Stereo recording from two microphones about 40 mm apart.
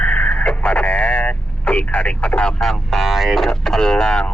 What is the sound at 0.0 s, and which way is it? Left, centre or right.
Vehicle, left.